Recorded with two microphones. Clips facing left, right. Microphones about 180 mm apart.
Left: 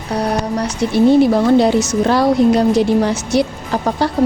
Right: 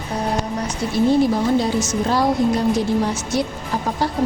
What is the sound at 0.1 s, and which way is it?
A woman's voice, 75° left (ahead or behind).